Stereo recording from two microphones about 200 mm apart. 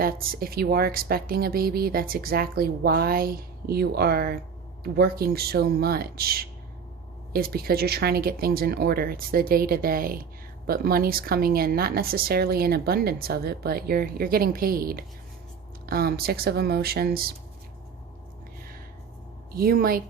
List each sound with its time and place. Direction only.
0.0 s speech: 45° right (ahead or behind)
19.5 s speech: 50° right (ahead or behind)